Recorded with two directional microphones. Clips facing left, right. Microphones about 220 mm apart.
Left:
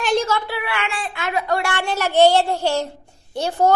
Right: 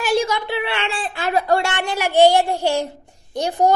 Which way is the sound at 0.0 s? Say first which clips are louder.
Even; 10° right (ahead or behind).